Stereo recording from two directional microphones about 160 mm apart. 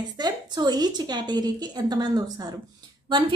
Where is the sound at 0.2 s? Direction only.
25° right (ahead or behind).